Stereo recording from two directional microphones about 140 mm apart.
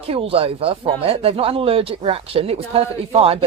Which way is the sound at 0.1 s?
45° right (ahead or behind).